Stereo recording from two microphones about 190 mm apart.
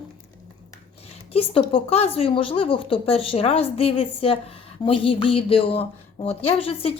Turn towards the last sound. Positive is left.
turn(degrees=30)  # may be behind; listen again after turning